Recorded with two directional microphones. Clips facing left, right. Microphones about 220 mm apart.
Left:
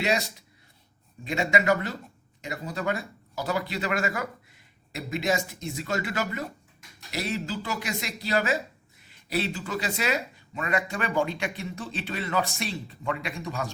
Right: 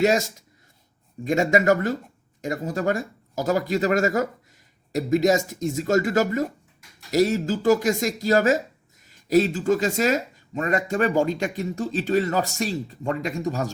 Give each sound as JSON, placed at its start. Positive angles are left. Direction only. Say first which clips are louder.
{"t": 0.0, "sound": "speech", "louder": "right 7 dB", "side_deg": -45}